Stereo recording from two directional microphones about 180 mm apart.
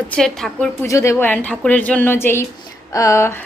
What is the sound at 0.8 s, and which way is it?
A woman's voice, 15° left (ahead or behind).